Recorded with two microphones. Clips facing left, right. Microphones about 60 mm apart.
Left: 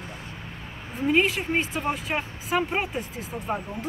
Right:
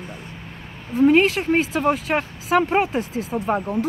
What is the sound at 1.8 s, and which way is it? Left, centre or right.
Speech, right.